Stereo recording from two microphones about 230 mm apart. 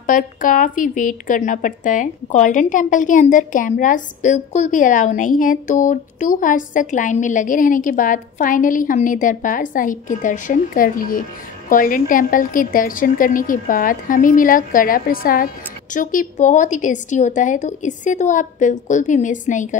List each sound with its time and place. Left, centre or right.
0.0 s a woman's voice: left